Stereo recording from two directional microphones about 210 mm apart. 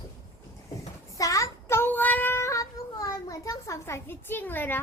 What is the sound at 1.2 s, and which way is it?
Child singing, 15° left (ahead or behind).